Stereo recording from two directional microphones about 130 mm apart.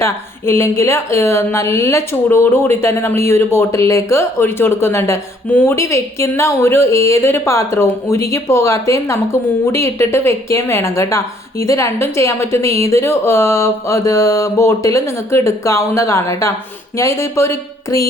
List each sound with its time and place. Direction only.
0.0 s a woman's voice: 20° left (ahead or behind)